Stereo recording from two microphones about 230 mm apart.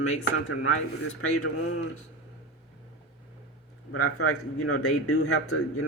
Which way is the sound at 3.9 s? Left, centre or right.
Left.